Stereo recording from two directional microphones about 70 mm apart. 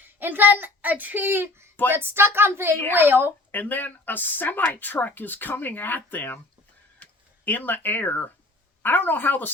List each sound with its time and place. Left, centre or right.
0.2 s a child's voice: right
3.5 s speech: left